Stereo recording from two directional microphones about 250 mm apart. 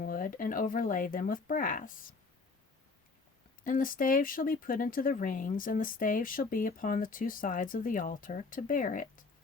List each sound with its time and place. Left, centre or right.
0.0 s speech: left
3.6 s speech: left